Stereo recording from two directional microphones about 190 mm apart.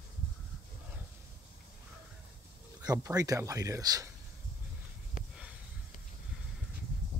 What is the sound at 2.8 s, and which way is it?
Speech, 20° right (ahead or behind).